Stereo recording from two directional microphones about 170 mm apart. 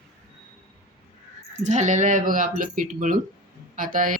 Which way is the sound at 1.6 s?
45° right (ahead or behind).